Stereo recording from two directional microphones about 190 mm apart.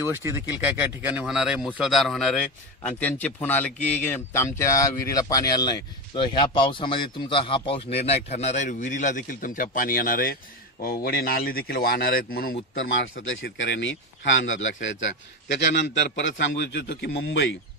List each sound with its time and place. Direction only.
0.0 s a man's voice: 15° right (ahead or behind); by 12.5 s 50° left (ahead or behind)
12.7 s speech: 80° left